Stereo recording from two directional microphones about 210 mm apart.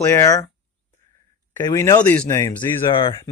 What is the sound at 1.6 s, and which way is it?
A man's voice, 15° left (ahead or behind).